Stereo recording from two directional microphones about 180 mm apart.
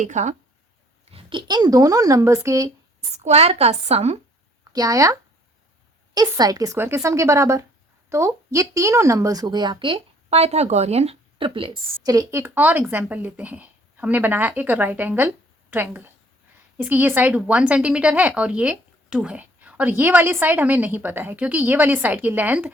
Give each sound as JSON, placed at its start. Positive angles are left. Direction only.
{"t": 0.0, "sound": "a woman's voice", "side_deg": -40}
{"t": 1.1, "sound": "speech", "side_deg": -25}
{"t": 3.0, "sound": "a woman's voice", "side_deg": -35}
{"t": 4.7, "sound": "speech", "side_deg": -20}
{"t": 6.1, "sound": "a woman's voice", "side_deg": -20}